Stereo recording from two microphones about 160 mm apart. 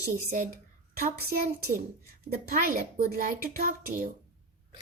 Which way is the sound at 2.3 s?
65° right (ahead or behind).